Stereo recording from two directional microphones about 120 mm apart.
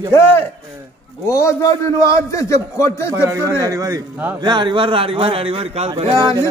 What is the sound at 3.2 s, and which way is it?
Speech, 25° right (ahead or behind).